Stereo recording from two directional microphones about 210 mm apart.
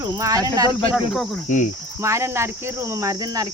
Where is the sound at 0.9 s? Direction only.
Centre (ahead or behind).